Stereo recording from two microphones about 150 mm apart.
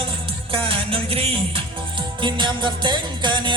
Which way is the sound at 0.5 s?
40° right (ahead or behind).